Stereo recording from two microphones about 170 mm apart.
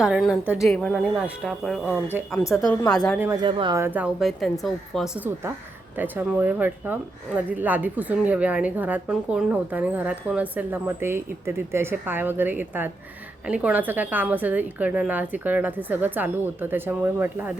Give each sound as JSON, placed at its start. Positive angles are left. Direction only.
{"t": 0.0, "sound": "speech", "side_deg": -5}
{"t": 1.8, "sound": "speech", "side_deg": 10}
{"t": 2.6, "sound": "speech", "side_deg": 5}
{"t": 3.4, "sound": "speech", "side_deg": -30}
{"t": 3.8, "sound": "speech", "side_deg": -10}